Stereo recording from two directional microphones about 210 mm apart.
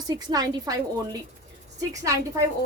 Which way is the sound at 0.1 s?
20° right (ahead or behind).